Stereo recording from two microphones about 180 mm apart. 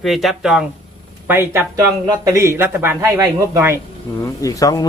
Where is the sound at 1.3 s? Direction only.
15° right (ahead or behind).